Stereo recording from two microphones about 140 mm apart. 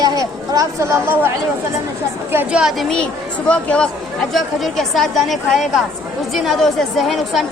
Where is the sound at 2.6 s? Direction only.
Centre (ahead or behind).